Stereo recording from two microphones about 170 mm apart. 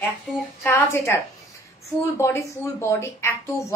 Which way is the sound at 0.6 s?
15° left (ahead or behind).